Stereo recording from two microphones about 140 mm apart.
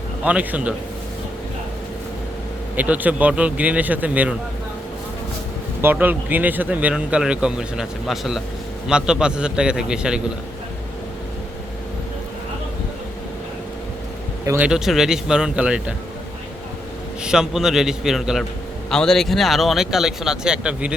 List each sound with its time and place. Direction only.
0.3 s speech: 10° right (ahead or behind)
2.7 s speech: 10° right (ahead or behind)
5.8 s speech: 15° right (ahead or behind)
14.4 s speech: 20° right (ahead or behind)
14.7 s speech: 5° right (ahead or behind)
17.2 s speech: 5° right (ahead or behind)